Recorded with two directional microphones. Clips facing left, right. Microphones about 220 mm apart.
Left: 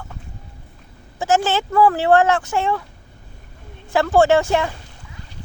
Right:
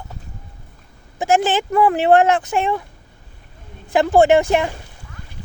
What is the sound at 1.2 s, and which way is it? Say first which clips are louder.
Speech: right 2 dB; 15° right (ahead or behind).